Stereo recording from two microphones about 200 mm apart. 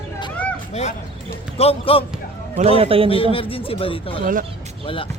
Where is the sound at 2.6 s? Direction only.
30° right (ahead or behind).